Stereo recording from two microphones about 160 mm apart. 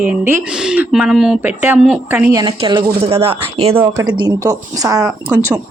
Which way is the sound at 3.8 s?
20° right (ahead or behind).